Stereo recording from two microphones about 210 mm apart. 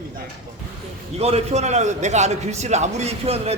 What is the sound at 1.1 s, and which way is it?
A man's voice, 30° right (ahead or behind).